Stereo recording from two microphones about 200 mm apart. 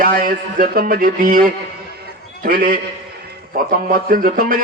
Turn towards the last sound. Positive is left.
turn(degrees=-45)  # may be behind; listen again after turning